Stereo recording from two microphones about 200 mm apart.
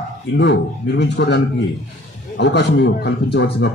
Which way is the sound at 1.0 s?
60° left (ahead or behind).